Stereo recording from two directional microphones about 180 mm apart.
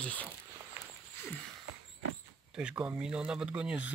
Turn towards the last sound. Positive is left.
turn(degrees=-5)  # may be behind; listen again after turning